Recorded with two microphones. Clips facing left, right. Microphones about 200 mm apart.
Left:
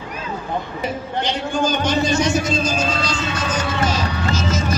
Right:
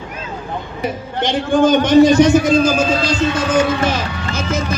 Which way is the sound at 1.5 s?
55° right (ahead or behind).